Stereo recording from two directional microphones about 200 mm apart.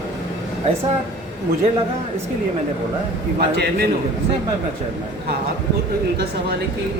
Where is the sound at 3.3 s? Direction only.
55° right (ahead or behind).